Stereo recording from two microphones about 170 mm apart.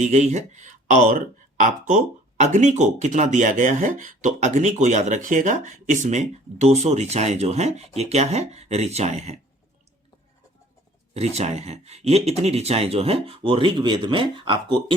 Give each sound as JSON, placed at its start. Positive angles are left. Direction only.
{"t": 0.0, "sound": "speech", "side_deg": -45}
{"t": 11.1, "sound": "speech", "side_deg": -40}